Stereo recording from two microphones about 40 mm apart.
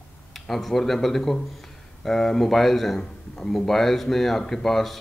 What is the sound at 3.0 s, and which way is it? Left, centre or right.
Speech, centre.